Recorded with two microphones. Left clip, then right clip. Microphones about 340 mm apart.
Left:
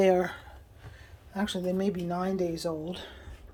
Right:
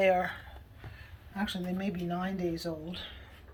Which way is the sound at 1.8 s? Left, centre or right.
Centre.